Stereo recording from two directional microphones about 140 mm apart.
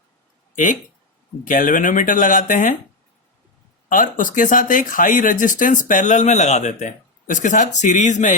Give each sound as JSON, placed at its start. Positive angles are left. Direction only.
{"t": 0.5, "sound": "speech", "side_deg": 65}
{"t": 3.8, "sound": "speech", "side_deg": 70}